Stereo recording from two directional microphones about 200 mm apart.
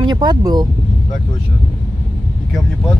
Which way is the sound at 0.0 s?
20° right (ahead or behind).